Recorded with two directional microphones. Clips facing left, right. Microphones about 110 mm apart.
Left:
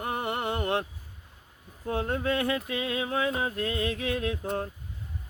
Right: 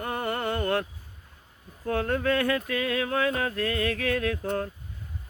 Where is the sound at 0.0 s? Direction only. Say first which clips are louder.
Right 1 dB; 20° left (ahead or behind).